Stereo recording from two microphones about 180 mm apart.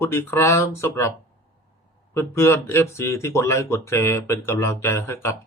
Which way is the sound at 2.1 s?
15° left (ahead or behind).